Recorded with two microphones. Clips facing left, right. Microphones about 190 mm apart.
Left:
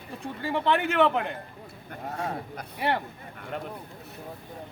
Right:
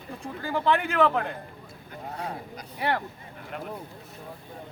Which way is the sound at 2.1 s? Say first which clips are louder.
Left 3 dB; 45° left (ahead or behind).